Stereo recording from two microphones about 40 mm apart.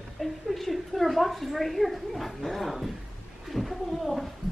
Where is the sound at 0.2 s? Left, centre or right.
Centre.